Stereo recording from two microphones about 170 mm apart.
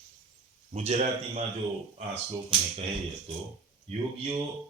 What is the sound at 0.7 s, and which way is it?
Speech, 40° right (ahead or behind).